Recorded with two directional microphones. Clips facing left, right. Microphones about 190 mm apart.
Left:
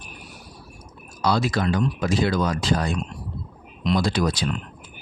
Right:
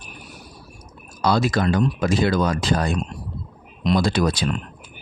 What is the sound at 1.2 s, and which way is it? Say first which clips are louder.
Speech: right 2 dB; 50° right (ahead or behind).